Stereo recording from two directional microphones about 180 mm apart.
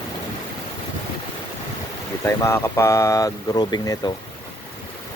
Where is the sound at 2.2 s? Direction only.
15° left (ahead or behind).